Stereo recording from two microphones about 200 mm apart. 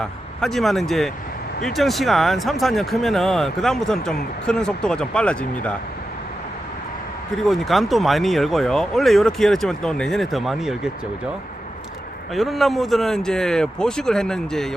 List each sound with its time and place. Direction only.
0.0 s speech: 5° left (ahead or behind)
7.4 s speech: centre (ahead or behind)
12.3 s speech: centre (ahead or behind)